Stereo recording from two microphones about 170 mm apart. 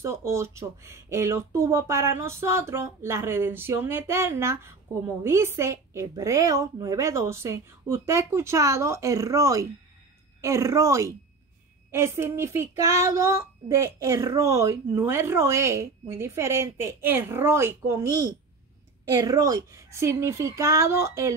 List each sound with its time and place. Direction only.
0.0 s speech: 15° right (ahead or behind)